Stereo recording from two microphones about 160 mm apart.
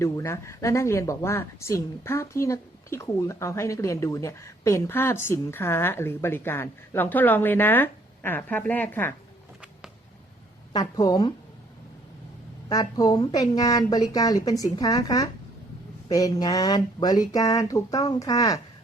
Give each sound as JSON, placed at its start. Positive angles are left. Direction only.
{"t": 0.0, "sound": "speech", "side_deg": 15}
{"t": 10.7, "sound": "a woman's voice", "side_deg": 25}
{"t": 12.6, "sound": "a woman's voice", "side_deg": 25}